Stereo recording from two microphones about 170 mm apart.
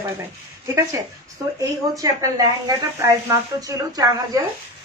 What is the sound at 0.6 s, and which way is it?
A woman's voice, 20° right (ahead or behind).